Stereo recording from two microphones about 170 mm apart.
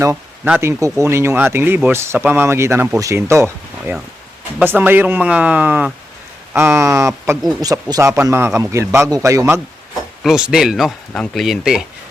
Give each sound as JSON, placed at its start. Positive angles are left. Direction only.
{"t": 0.0, "sound": "speech", "side_deg": -10}
{"t": 10.2, "sound": "speech", "side_deg": -5}